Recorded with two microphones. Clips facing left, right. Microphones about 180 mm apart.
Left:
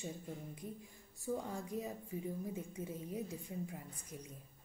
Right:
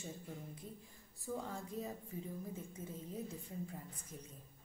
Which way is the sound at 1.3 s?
15° left (ahead or behind).